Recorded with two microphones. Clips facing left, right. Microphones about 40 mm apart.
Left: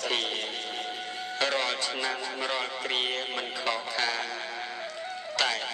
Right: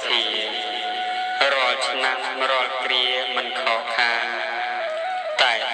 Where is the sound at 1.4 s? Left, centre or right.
Right.